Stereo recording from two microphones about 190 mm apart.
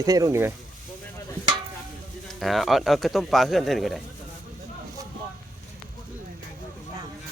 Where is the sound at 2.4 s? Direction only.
Centre (ahead or behind).